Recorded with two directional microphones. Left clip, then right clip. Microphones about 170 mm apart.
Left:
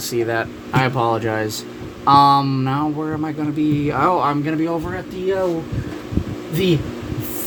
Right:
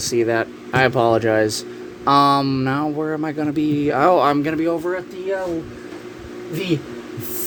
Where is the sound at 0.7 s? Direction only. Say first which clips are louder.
Right 3 dB; 40° right (ahead or behind).